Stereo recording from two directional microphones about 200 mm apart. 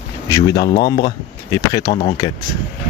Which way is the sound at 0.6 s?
20° left (ahead or behind).